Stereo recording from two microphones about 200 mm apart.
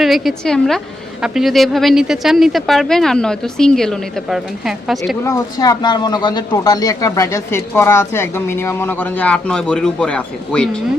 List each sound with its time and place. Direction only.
0.0 s speech: centre (ahead or behind)
5.2 s speech: 15° left (ahead or behind)